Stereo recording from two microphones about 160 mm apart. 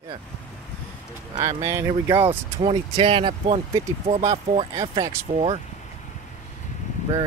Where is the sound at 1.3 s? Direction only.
25° right (ahead or behind).